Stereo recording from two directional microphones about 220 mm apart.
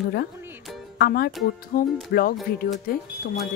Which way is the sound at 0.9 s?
45° left (ahead or behind).